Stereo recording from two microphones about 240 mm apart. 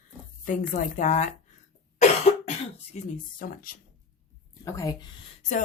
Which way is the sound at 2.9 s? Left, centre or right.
Left.